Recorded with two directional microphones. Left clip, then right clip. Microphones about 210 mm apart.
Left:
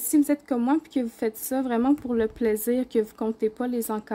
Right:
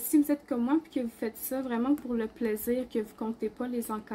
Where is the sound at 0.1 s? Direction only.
45° left (ahead or behind).